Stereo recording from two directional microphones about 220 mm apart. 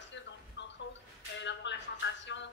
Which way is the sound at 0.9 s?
55° left (ahead or behind).